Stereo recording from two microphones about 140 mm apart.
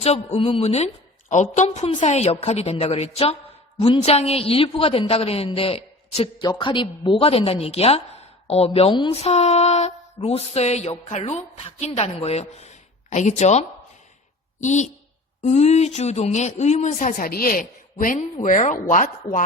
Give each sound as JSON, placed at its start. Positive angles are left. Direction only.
{"t": 0.0, "sound": "a woman's voice", "side_deg": 50}
{"t": 6.4, "sound": "a woman's voice", "side_deg": 30}